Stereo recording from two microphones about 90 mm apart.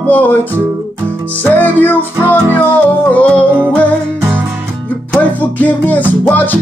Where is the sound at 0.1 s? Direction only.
20° left (ahead or behind).